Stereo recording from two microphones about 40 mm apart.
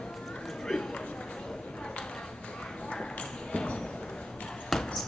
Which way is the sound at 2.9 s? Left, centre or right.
Left.